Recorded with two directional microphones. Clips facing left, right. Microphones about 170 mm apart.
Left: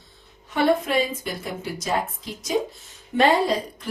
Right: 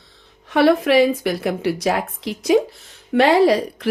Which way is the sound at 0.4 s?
85° right.